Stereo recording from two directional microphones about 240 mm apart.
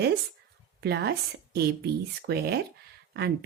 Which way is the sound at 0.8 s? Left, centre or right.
Right.